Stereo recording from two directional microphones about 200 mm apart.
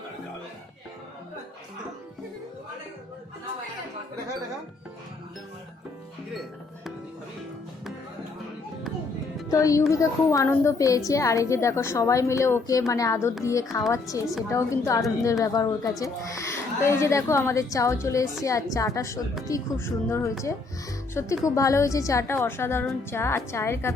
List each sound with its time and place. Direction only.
9.5 s a woman's voice: 15° left (ahead or behind)